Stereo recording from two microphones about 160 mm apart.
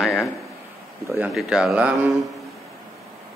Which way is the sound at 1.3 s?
5° right (ahead or behind).